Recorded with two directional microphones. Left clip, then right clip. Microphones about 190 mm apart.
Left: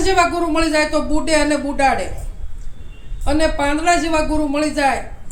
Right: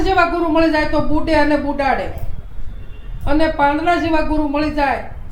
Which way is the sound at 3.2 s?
25° left (ahead or behind).